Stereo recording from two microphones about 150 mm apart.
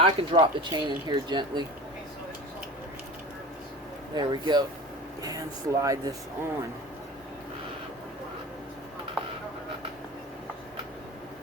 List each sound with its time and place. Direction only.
0.0 s speech: 35° right (ahead or behind)
4.1 s speech: 30° right (ahead or behind)